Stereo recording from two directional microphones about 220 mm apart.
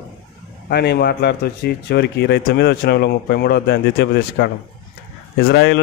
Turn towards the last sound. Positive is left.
turn(degrees=45)  # may be behind; listen again after turning